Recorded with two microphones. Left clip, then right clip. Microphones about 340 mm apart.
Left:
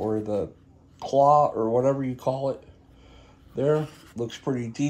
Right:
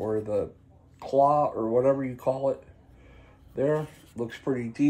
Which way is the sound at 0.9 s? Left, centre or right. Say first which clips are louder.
Left 3 dB; centre.